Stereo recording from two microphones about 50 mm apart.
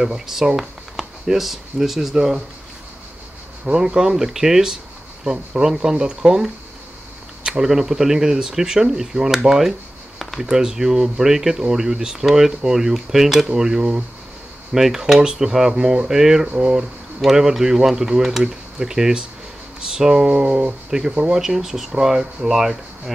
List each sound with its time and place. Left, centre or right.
0.0 s speech: centre
3.6 s speech: centre
10.4 s speech: centre
13.5 s speech: centre
14.7 s speech: centre